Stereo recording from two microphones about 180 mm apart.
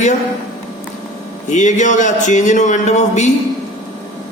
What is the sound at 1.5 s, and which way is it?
Speech, 40° left (ahead or behind).